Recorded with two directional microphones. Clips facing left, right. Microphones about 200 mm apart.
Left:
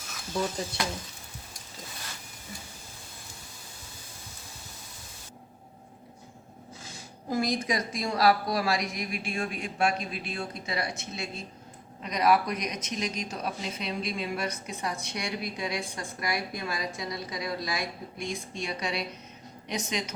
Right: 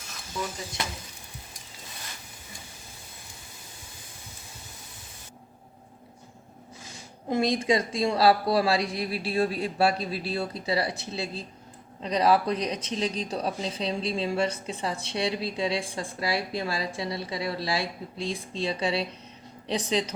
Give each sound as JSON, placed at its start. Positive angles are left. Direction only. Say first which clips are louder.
{"t": 7.3, "sound": "a woman's voice", "louder": "right 4 dB", "side_deg": -25}